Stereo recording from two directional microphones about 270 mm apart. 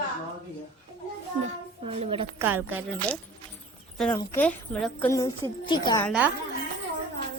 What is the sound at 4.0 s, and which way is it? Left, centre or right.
A woman's voice, centre.